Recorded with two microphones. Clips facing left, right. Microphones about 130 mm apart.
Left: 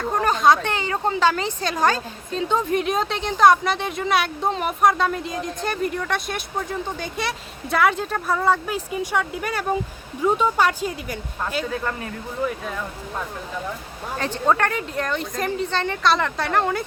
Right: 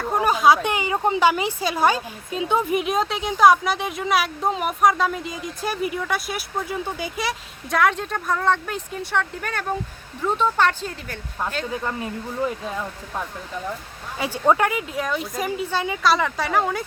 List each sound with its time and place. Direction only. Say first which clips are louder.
0.0 s speech: right 1 dB; 10° right (ahead or behind); by 11.2 s 10° left (ahead or behind)
11.6 s speech: even; 15° right (ahead or behind)
14.2 s speech: right 2 dB; 10° right (ahead or behind)